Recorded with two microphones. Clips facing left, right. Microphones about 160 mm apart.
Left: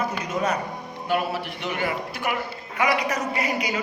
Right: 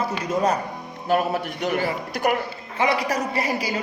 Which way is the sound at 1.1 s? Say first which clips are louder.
Right 4 dB; 45° right (ahead or behind).